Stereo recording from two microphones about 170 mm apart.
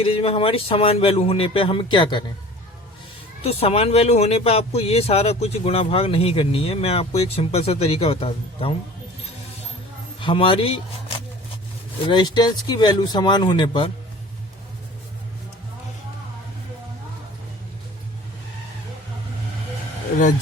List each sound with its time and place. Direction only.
0.0 s speech: 35° left (ahead or behind)
3.4 s speech: 35° left (ahead or behind)
10.2 s a man's voice: 30° left (ahead or behind)
12.0 s speech: 25° left (ahead or behind)